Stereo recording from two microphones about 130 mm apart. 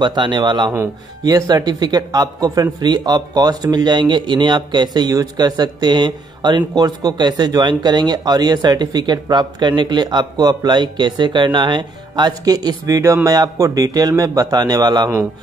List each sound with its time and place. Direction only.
0.0 s a man's voice: 35° right (ahead or behind)